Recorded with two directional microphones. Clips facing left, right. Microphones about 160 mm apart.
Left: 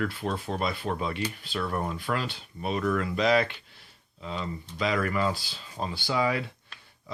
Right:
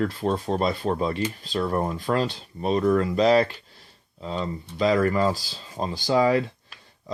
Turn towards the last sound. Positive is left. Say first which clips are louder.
# right 7 dB
turn(degrees=-35)  # may be behind; listen again after turning